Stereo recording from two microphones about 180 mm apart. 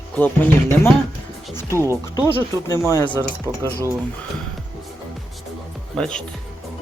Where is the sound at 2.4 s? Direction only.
15° left (ahead or behind).